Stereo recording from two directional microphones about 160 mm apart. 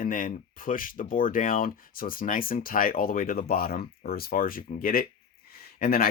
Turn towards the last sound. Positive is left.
turn(degrees=70)  # may be behind; listen again after turning